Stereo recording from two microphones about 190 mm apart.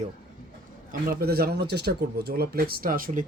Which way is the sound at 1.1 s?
55° right (ahead or behind).